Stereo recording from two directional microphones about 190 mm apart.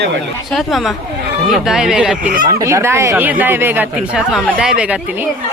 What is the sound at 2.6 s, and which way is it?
Speech, 15° right (ahead or behind).